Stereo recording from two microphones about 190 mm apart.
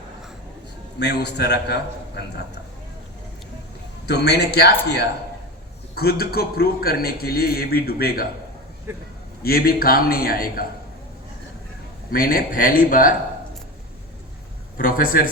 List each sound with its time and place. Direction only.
0.9 s a man's voice: 60° left (ahead or behind)
4.0 s a man's voice: 60° left (ahead or behind)
9.4 s a man's voice: 50° left (ahead or behind)
12.1 s a man's voice: 50° left (ahead or behind)
14.8 s a man's voice: 45° left (ahead or behind)